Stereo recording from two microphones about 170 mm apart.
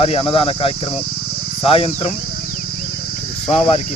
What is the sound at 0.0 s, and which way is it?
Speech, 35° left (ahead or behind).